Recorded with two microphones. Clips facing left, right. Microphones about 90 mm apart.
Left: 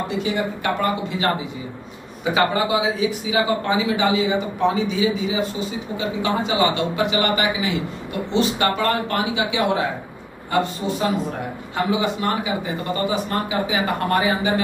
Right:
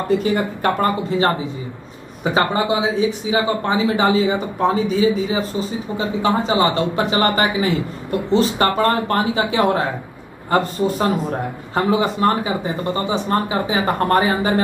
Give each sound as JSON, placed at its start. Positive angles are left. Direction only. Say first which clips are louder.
{"t": 0.2, "sound": "speech", "louder": "right 4 dB", "side_deg": -45}
{"t": 2.3, "sound": "speech", "louder": "right 1 dB", "side_deg": -30}